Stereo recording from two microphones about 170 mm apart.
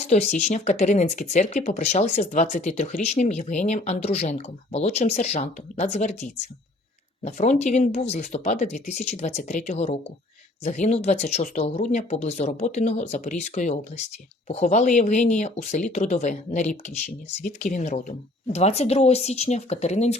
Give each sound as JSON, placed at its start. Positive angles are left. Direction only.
{"t": 0.1, "sound": "speech", "side_deg": 40}